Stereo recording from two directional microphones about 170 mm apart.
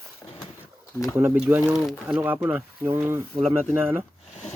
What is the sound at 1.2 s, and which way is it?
Speech, 10° right (ahead or behind).